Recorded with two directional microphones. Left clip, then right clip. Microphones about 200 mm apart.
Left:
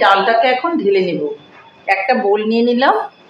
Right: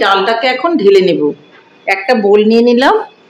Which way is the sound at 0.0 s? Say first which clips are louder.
Right 1 dB; 40° right (ahead or behind).